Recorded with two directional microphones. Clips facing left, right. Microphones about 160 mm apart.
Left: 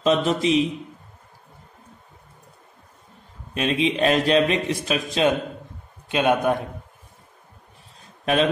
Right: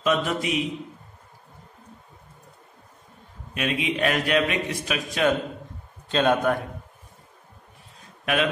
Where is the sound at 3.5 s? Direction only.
30° left (ahead or behind).